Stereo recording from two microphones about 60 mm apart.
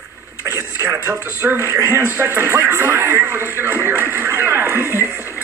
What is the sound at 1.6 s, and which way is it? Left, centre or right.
Speech, right.